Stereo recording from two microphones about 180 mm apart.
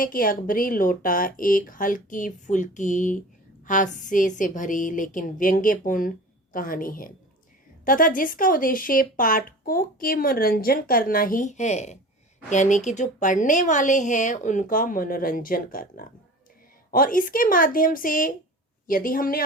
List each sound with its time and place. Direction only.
0.0 s speech: 50° left (ahead or behind)